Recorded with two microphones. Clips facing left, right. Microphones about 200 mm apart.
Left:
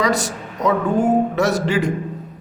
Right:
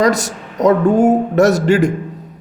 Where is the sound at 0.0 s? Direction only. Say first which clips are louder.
Right 5 dB; 45° right (ahead or behind).